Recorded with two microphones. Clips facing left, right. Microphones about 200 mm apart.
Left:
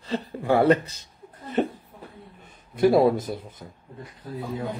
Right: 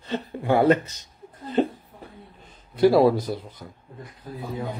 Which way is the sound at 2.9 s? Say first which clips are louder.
Right 1 dB; 25° left (ahead or behind).